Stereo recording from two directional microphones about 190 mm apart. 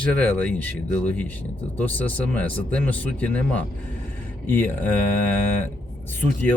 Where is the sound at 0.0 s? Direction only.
5° left (ahead or behind).